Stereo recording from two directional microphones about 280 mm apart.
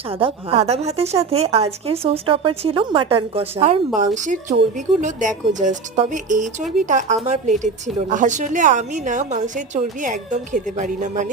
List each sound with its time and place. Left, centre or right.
0.1 s a woman's voice: centre